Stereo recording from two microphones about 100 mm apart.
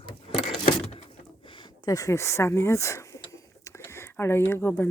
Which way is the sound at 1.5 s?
40° left (ahead or behind).